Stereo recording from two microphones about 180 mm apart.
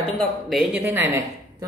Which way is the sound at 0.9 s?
10° right (ahead or behind).